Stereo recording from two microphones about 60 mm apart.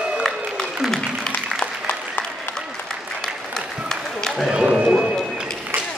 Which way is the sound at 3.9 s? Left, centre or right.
Centre.